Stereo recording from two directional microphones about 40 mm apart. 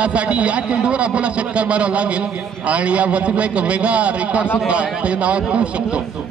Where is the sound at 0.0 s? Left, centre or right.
Right.